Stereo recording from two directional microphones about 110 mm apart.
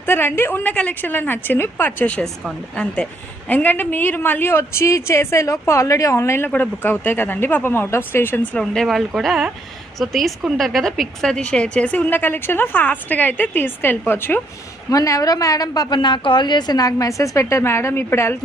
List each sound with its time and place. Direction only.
0.0 s a woman's voice: 20° left (ahead or behind)
8.5 s a woman's voice: 5° left (ahead or behind)
14.8 s a woman's voice: 30° left (ahead or behind)